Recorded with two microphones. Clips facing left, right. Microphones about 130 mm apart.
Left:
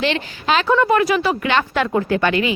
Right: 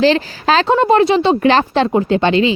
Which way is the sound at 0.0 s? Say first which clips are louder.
Right 8 dB; 35° right (ahead or behind).